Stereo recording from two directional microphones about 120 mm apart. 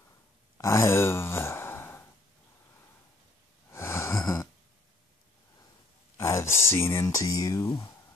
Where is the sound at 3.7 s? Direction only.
20° left (ahead or behind).